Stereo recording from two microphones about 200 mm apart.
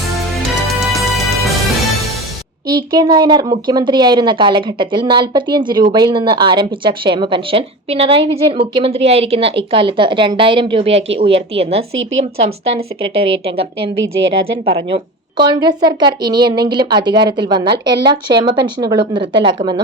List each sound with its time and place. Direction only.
0.7 s music: centre (ahead or behind)
2.6 s a woman's voice: 20° right (ahead or behind)
11.9 s speech: 75° right (ahead or behind)
12.7 s a woman's voice: 30° right (ahead or behind)